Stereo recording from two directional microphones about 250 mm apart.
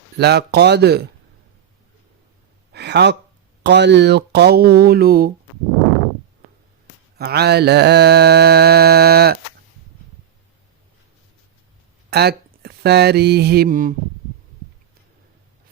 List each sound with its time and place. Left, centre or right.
0.2 s mantra: right
2.7 s a sound: right
3.6 s mantra: right
7.2 s mantra: right
12.1 s speech: right